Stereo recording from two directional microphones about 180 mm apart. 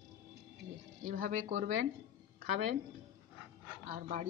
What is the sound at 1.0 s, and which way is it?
Speech, 45° right (ahead or behind).